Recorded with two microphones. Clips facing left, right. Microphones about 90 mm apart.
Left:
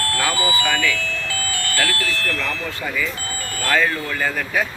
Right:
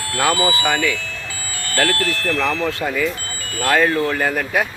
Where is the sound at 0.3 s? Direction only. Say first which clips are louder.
Right 6 dB; 85° right.